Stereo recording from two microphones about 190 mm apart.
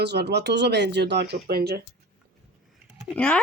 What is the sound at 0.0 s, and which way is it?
Speech, 60° right (ahead or behind).